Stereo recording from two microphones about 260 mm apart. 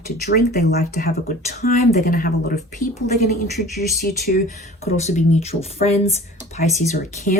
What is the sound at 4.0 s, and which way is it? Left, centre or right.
Speech, left.